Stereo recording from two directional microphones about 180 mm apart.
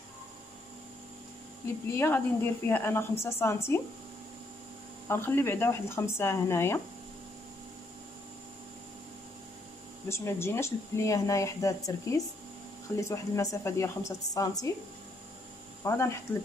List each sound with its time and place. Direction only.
1.9 s speech: 10° left (ahead or behind)
5.0 s speech: 15° left (ahead or behind)
10.0 s speech: 15° left (ahead or behind)
15.8 s speech: 15° left (ahead or behind)